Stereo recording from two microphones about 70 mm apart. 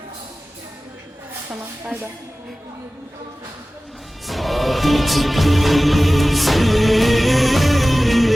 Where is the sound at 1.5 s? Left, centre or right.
Right.